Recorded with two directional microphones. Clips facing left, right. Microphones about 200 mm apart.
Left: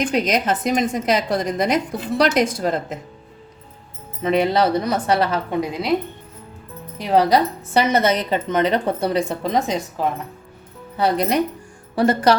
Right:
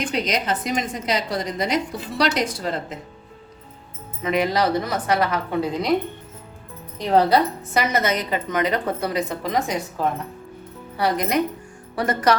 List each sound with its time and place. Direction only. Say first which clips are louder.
0.0 s a woman's voice: left 4 dB; 50° left (ahead or behind)
4.2 s a woman's voice: left 3 dB; 30° left (ahead or behind)
7.0 s speech: left 1 dB; 10° left (ahead or behind)
7.7 s a woman's voice: left 6 dB; 30° left (ahead or behind)
10.9 s a woman's voice: left 3 dB; 25° left (ahead or behind)